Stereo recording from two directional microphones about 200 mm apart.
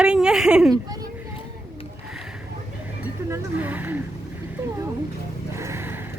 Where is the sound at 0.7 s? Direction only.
20° right (ahead or behind).